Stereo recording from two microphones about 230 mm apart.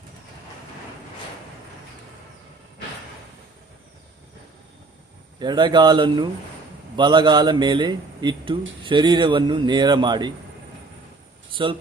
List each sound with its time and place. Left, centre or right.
5.4 s a man's voice: centre
11.5 s speech: right